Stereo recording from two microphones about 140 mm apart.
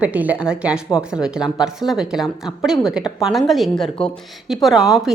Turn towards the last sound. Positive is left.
turn(degrees=-5)  # may be behind; listen again after turning